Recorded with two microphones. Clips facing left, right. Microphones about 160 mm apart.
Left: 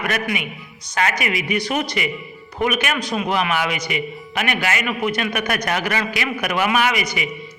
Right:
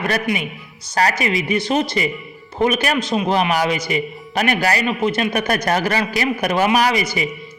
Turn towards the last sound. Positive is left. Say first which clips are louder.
# right 3 dB
turn(degrees=-30)  # may be behind; listen again after turning